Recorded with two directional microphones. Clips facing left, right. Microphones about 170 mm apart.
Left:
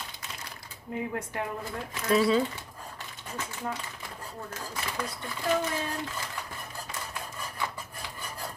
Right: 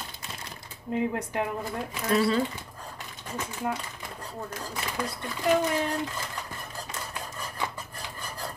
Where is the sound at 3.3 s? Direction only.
15° right (ahead or behind).